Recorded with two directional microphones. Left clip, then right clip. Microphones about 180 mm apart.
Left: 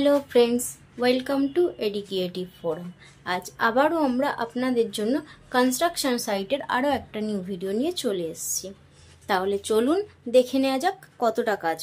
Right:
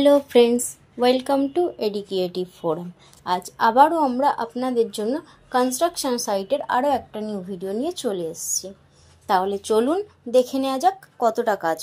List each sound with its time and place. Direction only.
0.0 s speech: 25° right (ahead or behind)
4.0 s a woman's voice: 5° right (ahead or behind)
9.3 s speech: 10° right (ahead or behind)